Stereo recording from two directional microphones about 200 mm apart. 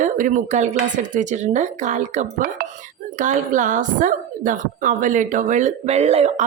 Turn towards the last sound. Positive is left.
turn(degrees=-30)  # may be behind; listen again after turning